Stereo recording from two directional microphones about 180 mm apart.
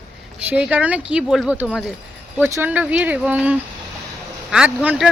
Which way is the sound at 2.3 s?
10° right (ahead or behind).